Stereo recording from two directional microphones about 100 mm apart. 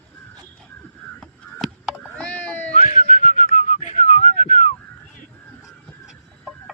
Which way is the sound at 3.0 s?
90° left.